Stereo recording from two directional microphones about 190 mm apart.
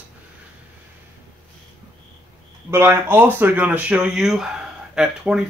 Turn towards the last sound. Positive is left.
turn(degrees=-5)  # may be behind; listen again after turning